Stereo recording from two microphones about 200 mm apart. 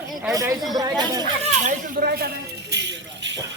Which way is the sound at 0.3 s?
15° right (ahead or behind).